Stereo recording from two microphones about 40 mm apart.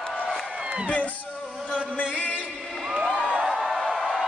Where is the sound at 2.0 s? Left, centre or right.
Left.